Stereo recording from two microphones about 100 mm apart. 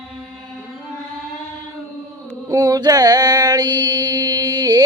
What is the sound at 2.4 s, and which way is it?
Mantra, 35° right (ahead or behind).